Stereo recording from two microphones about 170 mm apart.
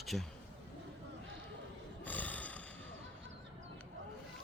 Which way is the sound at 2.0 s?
10° left (ahead or behind).